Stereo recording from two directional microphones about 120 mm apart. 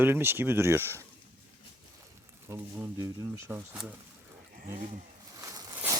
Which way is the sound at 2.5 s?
20° right (ahead or behind).